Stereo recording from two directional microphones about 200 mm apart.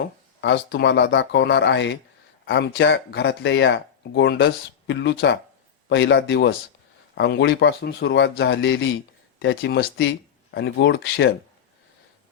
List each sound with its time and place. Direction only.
0.0 s speech: 60° left (ahead or behind)